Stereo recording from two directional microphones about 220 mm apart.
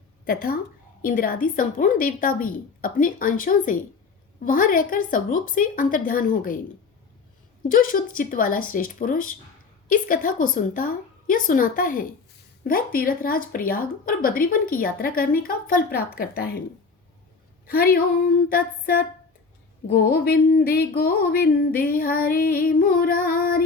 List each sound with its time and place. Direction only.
0.3 s speech: 40° left (ahead or behind)
7.7 s speech: 40° left (ahead or behind)
17.7 s speech: 40° left (ahead or behind)